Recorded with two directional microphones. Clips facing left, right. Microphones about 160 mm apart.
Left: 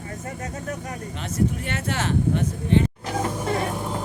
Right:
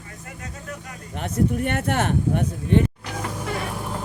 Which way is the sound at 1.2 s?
55° right (ahead or behind).